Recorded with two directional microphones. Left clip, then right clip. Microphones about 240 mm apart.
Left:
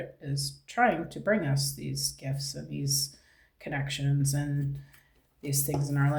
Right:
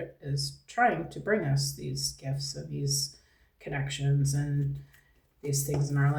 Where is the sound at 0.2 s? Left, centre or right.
Left.